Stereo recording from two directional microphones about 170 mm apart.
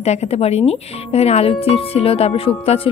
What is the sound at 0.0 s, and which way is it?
Speech, 40° left (ahead or behind).